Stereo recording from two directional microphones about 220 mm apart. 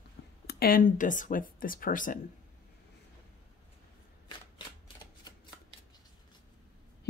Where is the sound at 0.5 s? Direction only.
45° left (ahead or behind).